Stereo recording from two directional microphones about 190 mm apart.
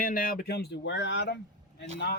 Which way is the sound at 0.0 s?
50° left (ahead or behind).